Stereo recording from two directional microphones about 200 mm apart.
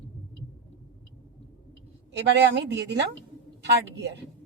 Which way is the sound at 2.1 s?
60° right (ahead or behind).